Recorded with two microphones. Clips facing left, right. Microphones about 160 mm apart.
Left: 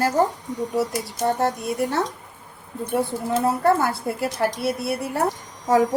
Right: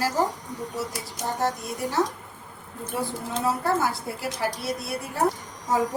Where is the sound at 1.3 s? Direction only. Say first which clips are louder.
Left 5 dB; 60° left (ahead or behind).